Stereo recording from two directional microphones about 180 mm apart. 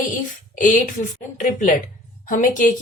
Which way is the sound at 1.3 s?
45° left (ahead or behind).